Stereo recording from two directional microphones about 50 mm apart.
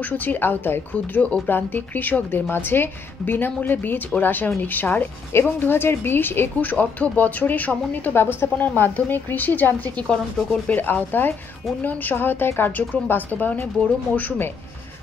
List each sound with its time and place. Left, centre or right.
0.0 s a woman's voice: left
0.9 s speech: left
1.5 s a woman's voice: left
2.4 s a woman's voice: left
5.3 s a woman's voice: left
6.6 s a woman's voice: left
8.2 s a woman's voice: left
8.6 s a woman's voice: left
9.9 s speech: centre
10.7 s a woman's voice: left